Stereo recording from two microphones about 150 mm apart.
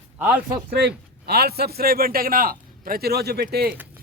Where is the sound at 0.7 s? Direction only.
90° right.